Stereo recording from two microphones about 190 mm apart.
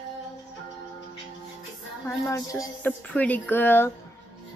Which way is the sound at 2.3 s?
15° left (ahead or behind).